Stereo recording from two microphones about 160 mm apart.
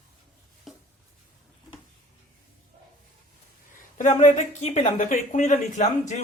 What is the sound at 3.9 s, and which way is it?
Speech, 50° left (ahead or behind).